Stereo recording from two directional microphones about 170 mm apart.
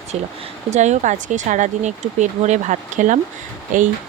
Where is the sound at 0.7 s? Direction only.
45° right (ahead or behind).